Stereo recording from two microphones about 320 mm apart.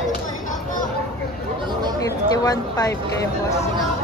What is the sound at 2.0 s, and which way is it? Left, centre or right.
Speech, centre.